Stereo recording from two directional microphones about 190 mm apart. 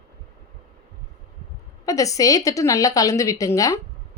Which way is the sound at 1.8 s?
15° left (ahead or behind).